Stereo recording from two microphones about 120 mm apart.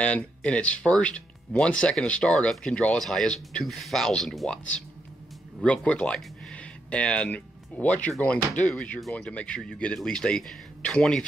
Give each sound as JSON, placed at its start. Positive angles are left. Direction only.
{"t": 0.0, "sound": "speech", "side_deg": 10}